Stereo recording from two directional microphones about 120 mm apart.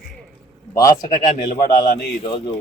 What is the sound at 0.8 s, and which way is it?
Speech, 30° left (ahead or behind).